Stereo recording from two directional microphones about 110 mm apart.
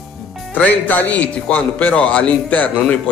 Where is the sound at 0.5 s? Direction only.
15° left (ahead or behind).